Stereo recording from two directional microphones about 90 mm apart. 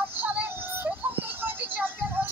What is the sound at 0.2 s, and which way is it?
Synthetic singing, 20° right (ahead or behind).